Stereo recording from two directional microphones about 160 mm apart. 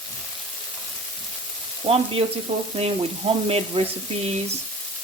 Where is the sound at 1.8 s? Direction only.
40° right (ahead or behind).